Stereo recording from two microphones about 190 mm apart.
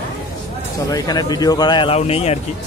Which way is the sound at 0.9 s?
20° left (ahead or behind).